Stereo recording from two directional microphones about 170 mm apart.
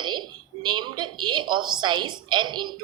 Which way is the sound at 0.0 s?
25° right (ahead or behind).